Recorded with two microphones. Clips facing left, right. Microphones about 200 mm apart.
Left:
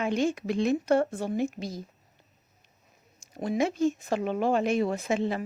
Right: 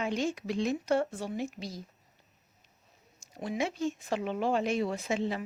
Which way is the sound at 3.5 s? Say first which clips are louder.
Left 6 dB; 45° left (ahead or behind).